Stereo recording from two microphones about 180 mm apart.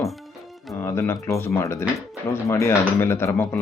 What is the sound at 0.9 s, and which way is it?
Speech, 15° left (ahead or behind).